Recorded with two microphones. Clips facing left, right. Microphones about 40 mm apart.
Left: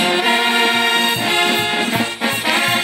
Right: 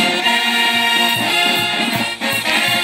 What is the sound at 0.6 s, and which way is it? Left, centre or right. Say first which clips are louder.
Music: even; centre.